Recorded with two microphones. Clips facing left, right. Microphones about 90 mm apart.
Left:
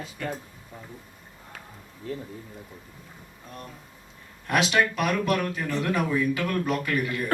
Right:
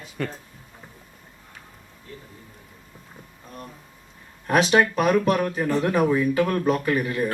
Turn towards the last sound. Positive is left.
turn(degrees=-30)  # may be behind; listen again after turning